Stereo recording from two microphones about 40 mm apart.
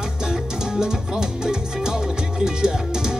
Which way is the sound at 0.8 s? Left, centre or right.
Centre.